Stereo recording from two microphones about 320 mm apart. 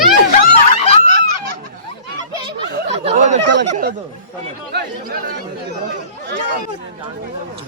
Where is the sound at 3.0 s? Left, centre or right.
Right.